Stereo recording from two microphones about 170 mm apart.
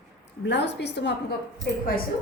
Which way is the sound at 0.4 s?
90° left.